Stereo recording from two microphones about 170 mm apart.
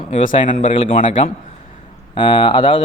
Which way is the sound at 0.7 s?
30° left (ahead or behind).